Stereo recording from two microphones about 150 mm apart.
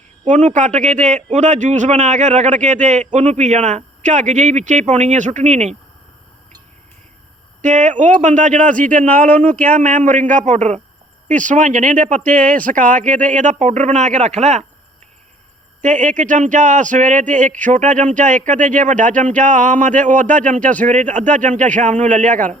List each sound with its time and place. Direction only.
0.3 s a man's voice: 55° right (ahead or behind)
7.6 s speech: 55° right (ahead or behind)
9.2 s speech: 10° left (ahead or behind)
9.7 s speech: 65° right (ahead or behind)
15.8 s speech: 60° right (ahead or behind)